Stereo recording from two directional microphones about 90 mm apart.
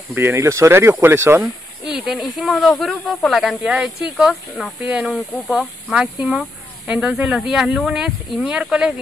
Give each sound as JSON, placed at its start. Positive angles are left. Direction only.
{"t": 0.1, "sound": "speech", "side_deg": -25}
{"t": 1.9, "sound": "speech", "side_deg": -5}
{"t": 4.8, "sound": "speech", "side_deg": -10}